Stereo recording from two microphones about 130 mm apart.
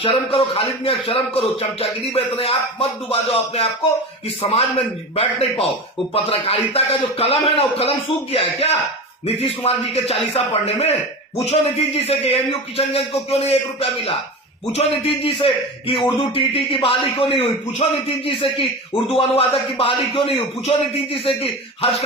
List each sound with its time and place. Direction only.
0.0 s speech: 50° left (ahead or behind)
5.1 s speech: 45° left (ahead or behind)